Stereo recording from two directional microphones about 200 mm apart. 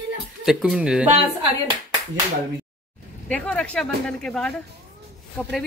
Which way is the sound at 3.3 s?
5° left (ahead or behind).